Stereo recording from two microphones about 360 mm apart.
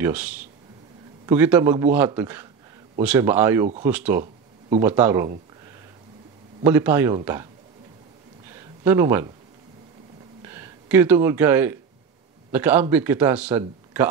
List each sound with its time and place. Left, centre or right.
0.0 s a man's voice: centre
4.2 s a sound: centre
4.8 s speech: centre
6.6 s a man's voice: centre
8.5 s a sound: centre
10.4 s a man's voice: centre